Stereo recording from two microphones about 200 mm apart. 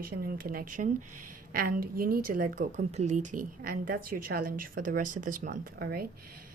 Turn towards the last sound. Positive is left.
turn(degrees=-50)  # may be behind; listen again after turning